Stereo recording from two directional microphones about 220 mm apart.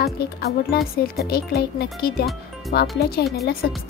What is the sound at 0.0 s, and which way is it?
Speech, 45° left (ahead or behind).